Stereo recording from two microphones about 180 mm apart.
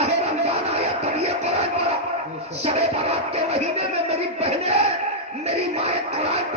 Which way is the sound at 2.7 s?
35° right (ahead or behind).